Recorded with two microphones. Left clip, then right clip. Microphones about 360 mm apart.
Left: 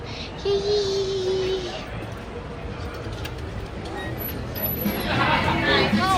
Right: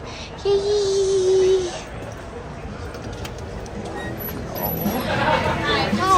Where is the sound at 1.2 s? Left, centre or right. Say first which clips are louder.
Right 7 dB; right.